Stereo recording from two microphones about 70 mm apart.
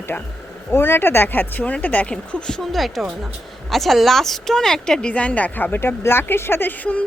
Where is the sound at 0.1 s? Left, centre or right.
Left.